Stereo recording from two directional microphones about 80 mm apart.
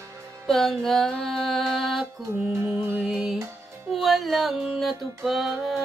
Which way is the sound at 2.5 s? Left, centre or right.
Right.